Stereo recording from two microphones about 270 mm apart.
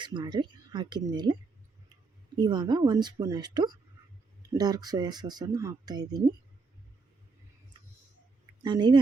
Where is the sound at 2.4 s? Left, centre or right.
Centre.